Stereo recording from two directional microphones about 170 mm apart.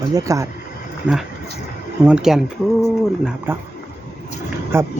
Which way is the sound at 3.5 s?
15° right (ahead or behind).